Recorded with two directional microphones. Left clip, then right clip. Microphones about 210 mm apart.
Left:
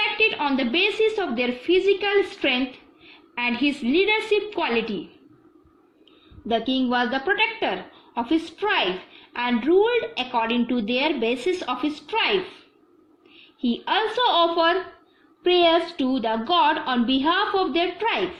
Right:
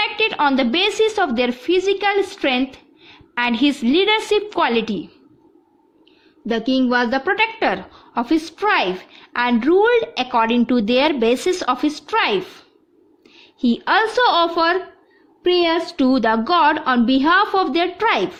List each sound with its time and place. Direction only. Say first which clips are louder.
0.2 s a woman's voice: right 4 dB; 50° right (ahead or behind)
6.5 s a woman's voice: right 4 dB; 50° right (ahead or behind)
13.6 s a woman's voice: right 6 dB; 55° right (ahead or behind)